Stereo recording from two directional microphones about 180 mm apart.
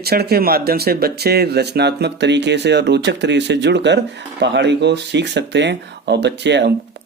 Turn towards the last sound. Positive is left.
turn(degrees=-75)  # may be behind; listen again after turning